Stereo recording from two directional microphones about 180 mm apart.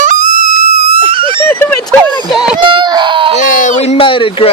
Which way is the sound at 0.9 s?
30° right (ahead or behind).